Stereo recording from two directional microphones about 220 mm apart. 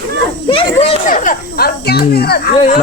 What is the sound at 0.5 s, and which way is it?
Children playing, 25° left (ahead or behind).